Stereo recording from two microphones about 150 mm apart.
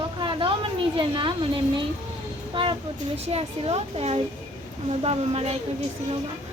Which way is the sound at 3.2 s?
45° right (ahead or behind).